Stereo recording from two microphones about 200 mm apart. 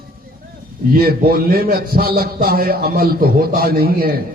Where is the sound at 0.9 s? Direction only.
50° right (ahead or behind).